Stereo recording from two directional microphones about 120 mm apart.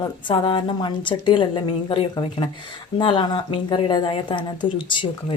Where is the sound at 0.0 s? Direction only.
40° left (ahead or behind).